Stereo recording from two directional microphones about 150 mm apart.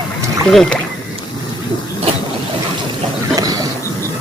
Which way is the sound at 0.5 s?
5° left (ahead or behind).